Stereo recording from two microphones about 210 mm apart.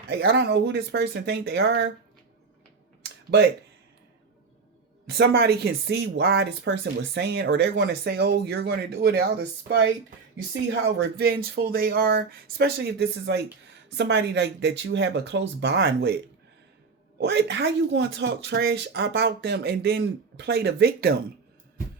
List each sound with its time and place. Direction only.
0.2 s speech: 50° right (ahead or behind)
3.0 s computer keyboard: 55° right (ahead or behind)
5.0 s speech: 50° right (ahead or behind)
11.2 s speech: 45° right (ahead or behind)
17.2 s speech: 55° right (ahead or behind)